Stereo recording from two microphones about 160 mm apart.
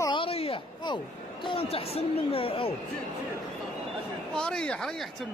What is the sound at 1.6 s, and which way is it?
Speech, 35° left (ahead or behind).